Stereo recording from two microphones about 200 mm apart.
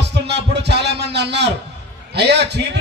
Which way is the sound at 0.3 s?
55° right (ahead or behind).